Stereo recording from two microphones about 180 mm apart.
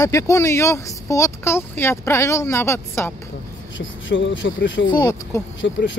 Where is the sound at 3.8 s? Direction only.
90° left.